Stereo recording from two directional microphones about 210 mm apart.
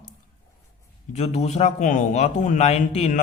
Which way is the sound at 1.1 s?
30° left (ahead or behind).